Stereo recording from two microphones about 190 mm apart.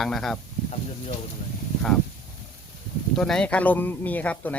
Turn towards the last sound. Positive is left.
turn(degrees=10)  # may be behind; listen again after turning